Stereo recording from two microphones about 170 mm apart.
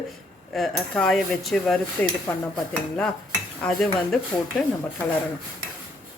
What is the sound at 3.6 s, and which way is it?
Speech, centre (ahead or behind).